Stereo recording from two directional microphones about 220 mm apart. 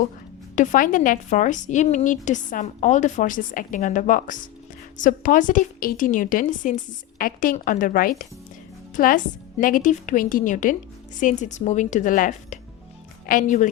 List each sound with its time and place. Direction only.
0.5 s a woman's voice: 35° left (ahead or behind)